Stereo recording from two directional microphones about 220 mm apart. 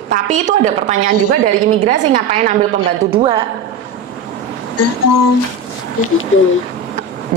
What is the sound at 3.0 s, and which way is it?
Speech, 25° right (ahead or behind).